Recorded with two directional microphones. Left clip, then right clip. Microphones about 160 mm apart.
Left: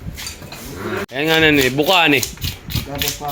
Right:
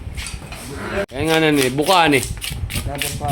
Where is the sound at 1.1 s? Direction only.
10° right (ahead or behind).